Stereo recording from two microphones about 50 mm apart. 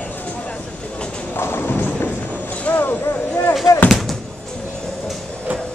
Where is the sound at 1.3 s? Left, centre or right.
Left.